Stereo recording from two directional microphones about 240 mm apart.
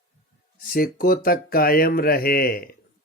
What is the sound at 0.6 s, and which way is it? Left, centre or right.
Speech, left.